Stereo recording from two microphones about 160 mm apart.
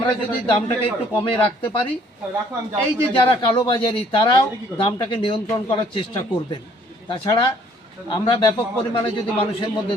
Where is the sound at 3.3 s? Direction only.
30° left (ahead or behind).